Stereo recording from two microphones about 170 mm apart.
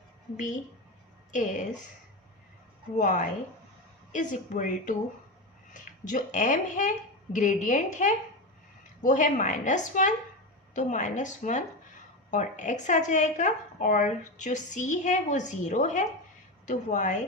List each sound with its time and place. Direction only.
0.3 s a woman's voice: 45° left (ahead or behind)
2.9 s a woman's voice: 45° left (ahead or behind)